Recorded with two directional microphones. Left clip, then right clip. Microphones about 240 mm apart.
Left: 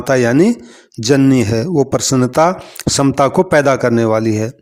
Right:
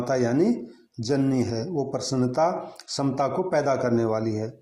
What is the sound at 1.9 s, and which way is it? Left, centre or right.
Speech, left.